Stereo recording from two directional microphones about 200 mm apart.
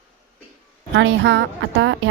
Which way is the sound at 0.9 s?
65° right (ahead or behind).